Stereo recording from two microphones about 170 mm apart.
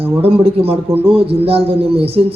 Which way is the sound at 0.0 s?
35° right (ahead or behind).